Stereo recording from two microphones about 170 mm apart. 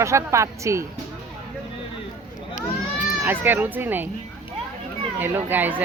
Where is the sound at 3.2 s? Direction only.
10° right (ahead or behind).